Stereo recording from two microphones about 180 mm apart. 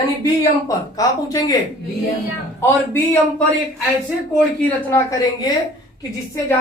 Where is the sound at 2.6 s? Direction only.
10° left (ahead or behind).